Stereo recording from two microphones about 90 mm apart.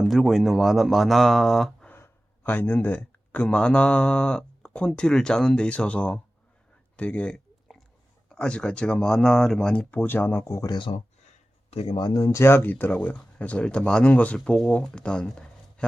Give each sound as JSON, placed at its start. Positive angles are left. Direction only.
{"t": 0.0, "sound": "speech", "side_deg": 0}
{"t": 2.0, "sound": "speech", "side_deg": 20}
{"t": 6.9, "sound": "a sound", "side_deg": 15}
{"t": 8.3, "sound": "speech", "side_deg": 10}
{"t": 9.9, "sound": "speech", "side_deg": 20}
{"t": 10.7, "sound": "speech", "side_deg": 65}
{"t": 11.8, "sound": "speech", "side_deg": 90}
{"t": 12.0, "sound": "speech", "side_deg": 45}